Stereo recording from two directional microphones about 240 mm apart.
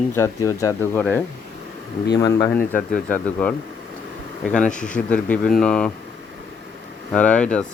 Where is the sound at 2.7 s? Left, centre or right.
Left.